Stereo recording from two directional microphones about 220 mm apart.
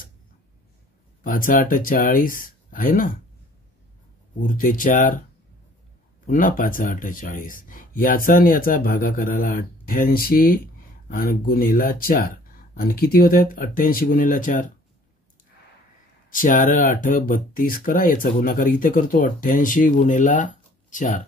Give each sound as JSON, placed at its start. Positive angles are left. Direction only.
{"t": 1.2, "sound": "speech", "side_deg": 40}
{"t": 4.4, "sound": "speech", "side_deg": 40}
{"t": 6.2, "sound": "speech", "side_deg": 40}
{"t": 16.3, "sound": "speech", "side_deg": 35}